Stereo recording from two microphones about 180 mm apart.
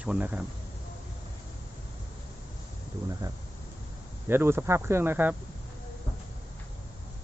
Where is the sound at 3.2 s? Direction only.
20° right (ahead or behind).